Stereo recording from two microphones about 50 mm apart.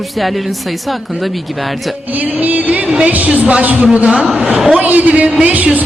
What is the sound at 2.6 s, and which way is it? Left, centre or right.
A woman's voice, right.